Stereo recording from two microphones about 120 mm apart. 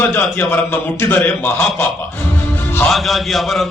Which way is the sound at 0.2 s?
15° left (ahead or behind).